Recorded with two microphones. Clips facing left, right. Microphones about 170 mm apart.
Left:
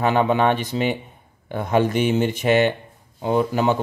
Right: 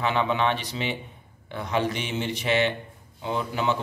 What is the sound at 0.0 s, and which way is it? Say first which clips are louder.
Speech: left 6 dB; 45° left (ahead or behind).